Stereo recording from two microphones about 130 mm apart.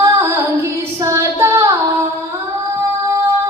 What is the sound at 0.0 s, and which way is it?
Female singing, 20° right (ahead or behind).